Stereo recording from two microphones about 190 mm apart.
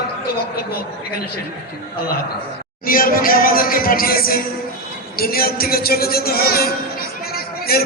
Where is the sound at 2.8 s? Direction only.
50° left (ahead or behind).